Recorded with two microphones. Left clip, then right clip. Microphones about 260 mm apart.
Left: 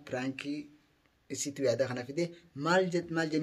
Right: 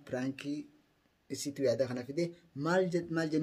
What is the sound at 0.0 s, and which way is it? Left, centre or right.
Speech, centre.